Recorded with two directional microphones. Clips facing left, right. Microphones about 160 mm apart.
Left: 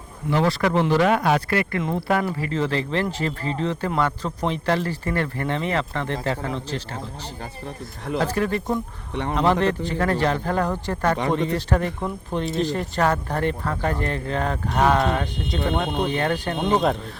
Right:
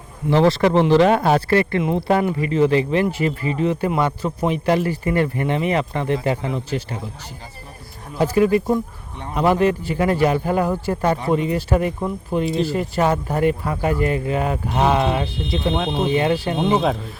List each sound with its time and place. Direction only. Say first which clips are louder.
0.3 s speech: right 5 dB; 30° right (ahead or behind); by 7.0 s 10° right (ahead or behind)
8.2 s speech: right 8 dB; 10° right (ahead or behind)
15.7 s speech: right 1 dB; centre (ahead or behind)
16.0 s speech: right 5 dB; 10° right (ahead or behind)